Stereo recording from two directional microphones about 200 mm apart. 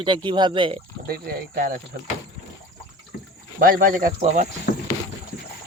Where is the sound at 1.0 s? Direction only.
50° right (ahead or behind).